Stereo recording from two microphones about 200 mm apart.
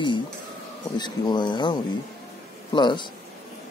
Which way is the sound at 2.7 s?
20° left (ahead or behind).